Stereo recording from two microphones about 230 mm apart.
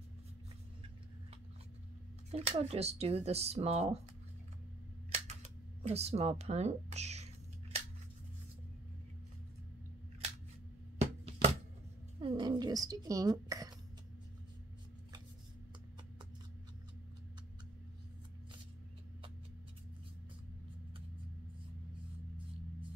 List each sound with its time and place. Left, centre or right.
2.3 s speech: right
5.1 s camera: right
11.0 s a sound: right
12.2 s cough: right